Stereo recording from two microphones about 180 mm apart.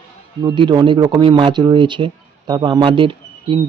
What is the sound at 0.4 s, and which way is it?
Speech, 25° right (ahead or behind).